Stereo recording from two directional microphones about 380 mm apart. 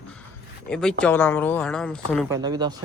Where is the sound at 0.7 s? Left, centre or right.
Centre.